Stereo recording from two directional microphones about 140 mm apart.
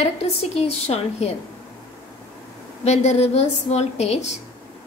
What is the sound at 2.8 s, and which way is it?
A woman's voice, 50° left (ahead or behind).